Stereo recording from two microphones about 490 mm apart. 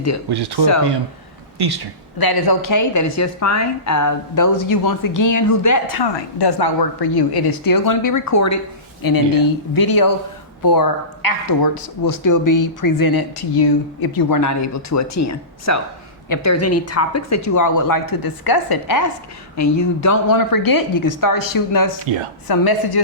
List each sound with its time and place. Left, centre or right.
0.3 s speech: right
2.1 s speech: left
6.1 s a woman's voice: left